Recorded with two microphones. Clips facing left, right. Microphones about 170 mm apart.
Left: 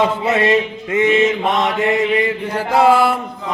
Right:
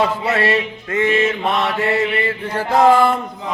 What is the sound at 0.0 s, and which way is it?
Mantra, 20° left (ahead or behind).